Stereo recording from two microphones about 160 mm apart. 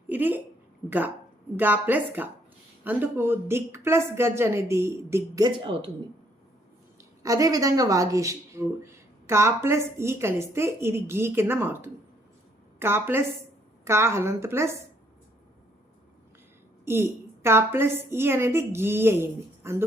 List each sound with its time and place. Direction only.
0.1 s a woman's voice: 10° right (ahead or behind); by 5.9 s 35° right (ahead or behind)
7.2 s speech: 20° right (ahead or behind)
16.8 s speech: 15° right (ahead or behind)